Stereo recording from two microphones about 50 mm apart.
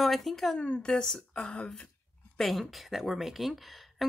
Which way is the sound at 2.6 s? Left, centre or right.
Centre.